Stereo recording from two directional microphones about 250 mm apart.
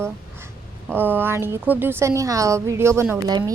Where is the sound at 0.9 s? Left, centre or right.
Centre.